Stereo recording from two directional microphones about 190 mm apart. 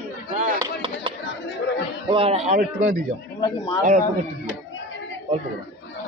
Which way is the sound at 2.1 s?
35° right (ahead or behind).